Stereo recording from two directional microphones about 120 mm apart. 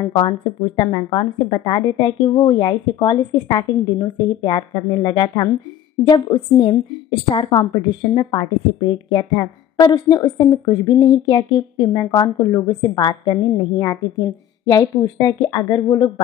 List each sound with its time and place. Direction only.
0.2 s a woman's voice: 40° left (ahead or behind)